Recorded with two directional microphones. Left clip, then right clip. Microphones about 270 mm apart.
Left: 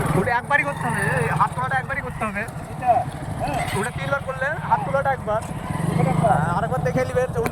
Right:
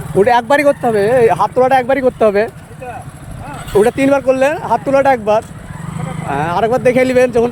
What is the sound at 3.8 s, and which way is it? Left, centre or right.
Speech, right.